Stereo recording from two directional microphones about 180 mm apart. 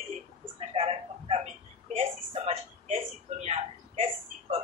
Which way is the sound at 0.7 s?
35° right (ahead or behind).